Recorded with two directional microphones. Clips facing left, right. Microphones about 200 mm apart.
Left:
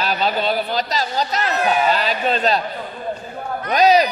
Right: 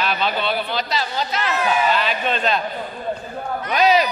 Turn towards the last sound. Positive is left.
turn(degrees=40)  # may be behind; listen again after turning